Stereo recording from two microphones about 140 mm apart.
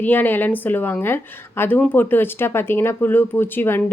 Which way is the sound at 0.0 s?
15° left (ahead or behind).